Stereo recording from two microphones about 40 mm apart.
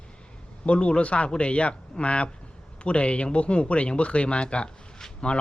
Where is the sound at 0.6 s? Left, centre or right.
Left.